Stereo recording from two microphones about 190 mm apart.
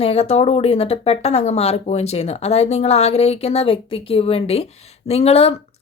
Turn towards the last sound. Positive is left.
turn(degrees=30)  # may be behind; listen again after turning